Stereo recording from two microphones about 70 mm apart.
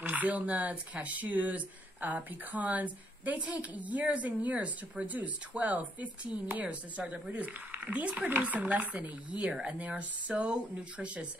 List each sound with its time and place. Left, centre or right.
0.0 s speech: right